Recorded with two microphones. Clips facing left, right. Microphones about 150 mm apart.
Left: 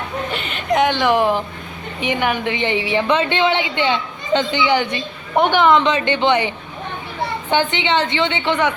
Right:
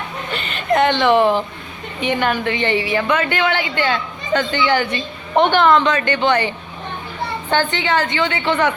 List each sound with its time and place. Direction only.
0.8 s a woman's voice: 10° left (ahead or behind)
7.5 s a woman's voice: 20° left (ahead or behind)